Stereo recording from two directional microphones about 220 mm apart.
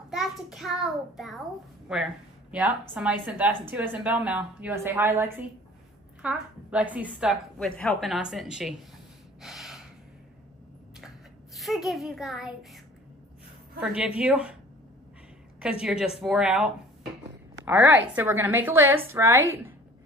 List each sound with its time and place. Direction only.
0.1 s a child's voice: centre (ahead or behind)
9.4 s gasp: centre (ahead or behind)
11.5 s a woman's voice: centre (ahead or behind)
15.8 s a woman's voice: 5° right (ahead or behind)
17.3 s a sound: 10° right (ahead or behind)
18.1 s a woman's voice: 10° right (ahead or behind)